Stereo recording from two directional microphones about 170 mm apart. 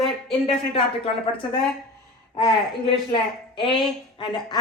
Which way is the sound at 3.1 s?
30° left (ahead or behind).